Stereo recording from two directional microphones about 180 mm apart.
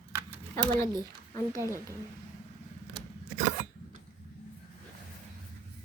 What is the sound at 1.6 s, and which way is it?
Speech, 15° right (ahead or behind).